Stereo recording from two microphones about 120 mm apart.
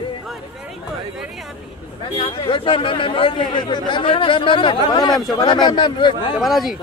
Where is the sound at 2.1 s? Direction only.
50° left (ahead or behind).